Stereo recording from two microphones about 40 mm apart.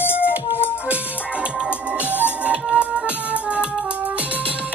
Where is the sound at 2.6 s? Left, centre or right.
Right.